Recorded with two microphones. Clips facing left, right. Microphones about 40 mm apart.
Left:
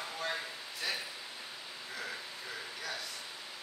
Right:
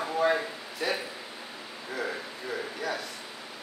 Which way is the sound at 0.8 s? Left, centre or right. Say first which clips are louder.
Right 8 dB; centre.